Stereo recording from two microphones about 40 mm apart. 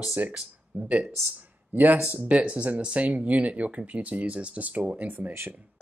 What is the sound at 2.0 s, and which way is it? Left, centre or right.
Speech, right.